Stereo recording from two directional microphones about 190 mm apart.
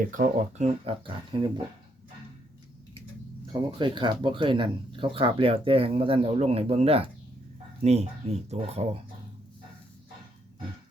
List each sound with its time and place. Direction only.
0.1 s speech: 40° right (ahead or behind); by 1.6 s 25° right (ahead or behind)
3.5 s speech: 25° right (ahead or behind)